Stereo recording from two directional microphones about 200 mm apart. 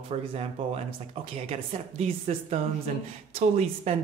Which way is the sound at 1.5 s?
30° right (ahead or behind).